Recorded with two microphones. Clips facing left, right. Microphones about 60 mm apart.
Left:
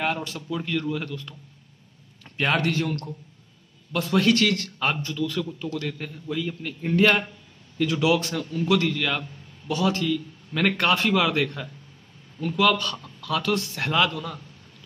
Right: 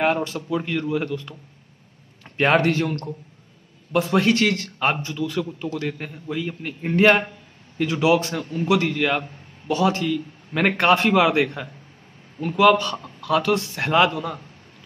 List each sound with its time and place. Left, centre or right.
0.0 s a man's voice: right